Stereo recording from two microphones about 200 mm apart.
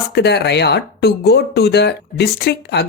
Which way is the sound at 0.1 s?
55° left (ahead or behind).